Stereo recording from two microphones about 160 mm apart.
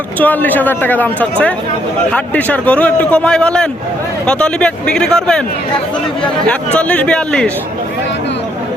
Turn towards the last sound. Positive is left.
turn(degrees=5)  # may be behind; listen again after turning